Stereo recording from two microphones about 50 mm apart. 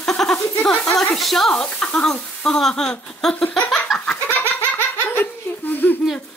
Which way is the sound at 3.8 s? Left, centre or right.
Centre.